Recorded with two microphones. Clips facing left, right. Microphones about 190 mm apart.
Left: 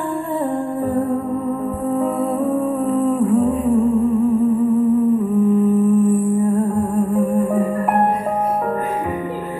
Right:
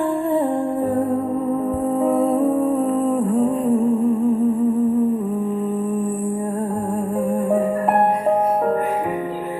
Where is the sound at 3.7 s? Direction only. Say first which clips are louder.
Left 3 dB; 20° right (ahead or behind).